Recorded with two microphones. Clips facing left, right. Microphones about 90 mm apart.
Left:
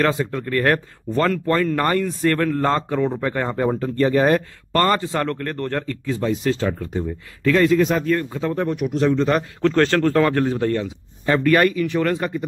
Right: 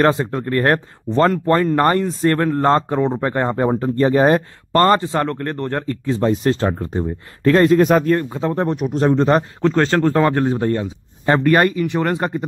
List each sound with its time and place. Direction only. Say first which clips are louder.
0.0 s speech: right 4 dB; 30° right (ahead or behind)
6.2 s speech: right 4 dB; 40° right (ahead or behind)
8.2 s speech: right 3 dB; 25° right (ahead or behind)
9.6 s speech: right 1 dB; 20° right (ahead or behind)